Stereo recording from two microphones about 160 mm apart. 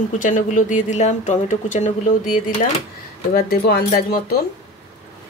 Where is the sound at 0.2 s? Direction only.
50° left (ahead or behind).